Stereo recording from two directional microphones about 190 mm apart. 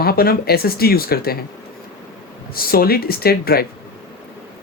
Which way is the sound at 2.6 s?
50° left (ahead or behind).